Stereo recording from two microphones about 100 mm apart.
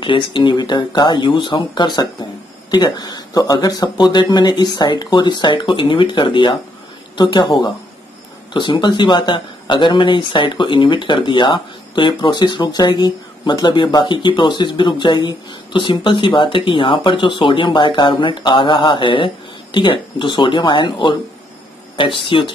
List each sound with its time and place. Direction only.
0.0 s speech: 55° left (ahead or behind)